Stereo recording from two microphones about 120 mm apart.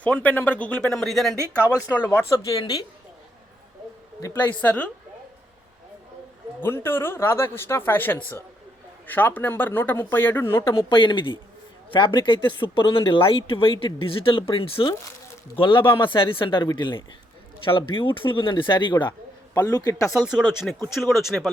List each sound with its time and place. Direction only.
0.0 s speech: 15° left (ahead or behind)
2.0 s speech: 20° left (ahead or behind)
4.2 s speech: 15° left (ahead or behind)
6.6 s speech: 20° left (ahead or behind)
10.8 s speech: 45° left (ahead or behind); by 20.1 s 25° left (ahead or behind)
20.1 s speech: 5° right (ahead or behind)